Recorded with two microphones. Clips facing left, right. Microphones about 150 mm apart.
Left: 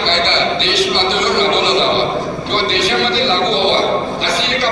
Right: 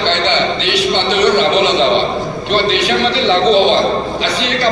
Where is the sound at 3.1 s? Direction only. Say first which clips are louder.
Right 4 dB; 55° right (ahead or behind).